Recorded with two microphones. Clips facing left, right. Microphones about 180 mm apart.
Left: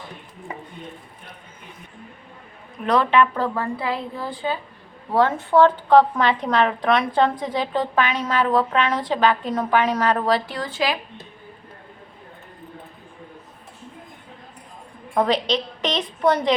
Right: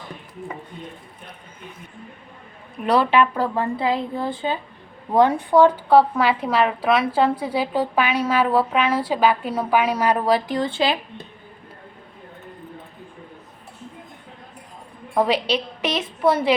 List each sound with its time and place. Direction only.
2.8 s a woman's voice: 10° right (ahead or behind)
10.6 s a woman's voice: 25° right (ahead or behind)
15.1 s a woman's voice: 10° right (ahead or behind)